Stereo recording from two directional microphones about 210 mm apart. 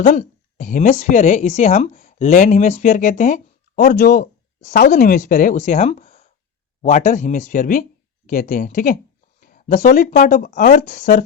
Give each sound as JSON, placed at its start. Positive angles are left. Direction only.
{"t": 0.0, "sound": "a woman's voice", "side_deg": 35}